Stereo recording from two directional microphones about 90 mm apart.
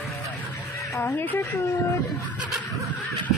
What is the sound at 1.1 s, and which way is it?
Speech, 25° left (ahead or behind).